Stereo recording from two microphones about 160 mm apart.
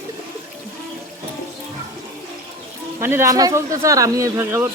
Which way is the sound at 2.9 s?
15° right (ahead or behind).